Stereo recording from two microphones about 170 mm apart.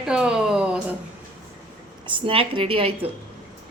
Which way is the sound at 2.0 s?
30° right (ahead or behind).